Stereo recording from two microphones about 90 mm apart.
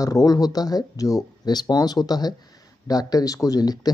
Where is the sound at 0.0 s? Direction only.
40° left (ahead or behind).